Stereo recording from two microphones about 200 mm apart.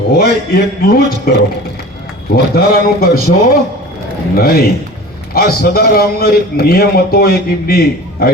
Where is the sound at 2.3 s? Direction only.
50° left (ahead or behind).